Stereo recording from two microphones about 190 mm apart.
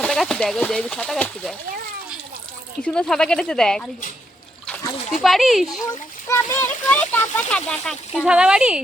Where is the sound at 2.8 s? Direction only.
5° left (ahead or behind).